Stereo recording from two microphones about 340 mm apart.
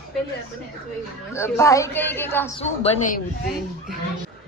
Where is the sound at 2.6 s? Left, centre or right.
Left.